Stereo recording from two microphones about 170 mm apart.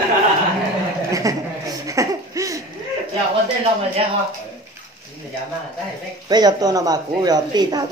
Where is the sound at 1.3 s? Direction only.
20° right (ahead or behind).